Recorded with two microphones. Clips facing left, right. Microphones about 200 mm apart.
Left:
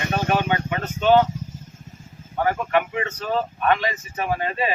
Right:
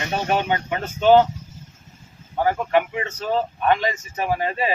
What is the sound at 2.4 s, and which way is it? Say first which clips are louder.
Speech: right 2 dB; 25° right (ahead or behind).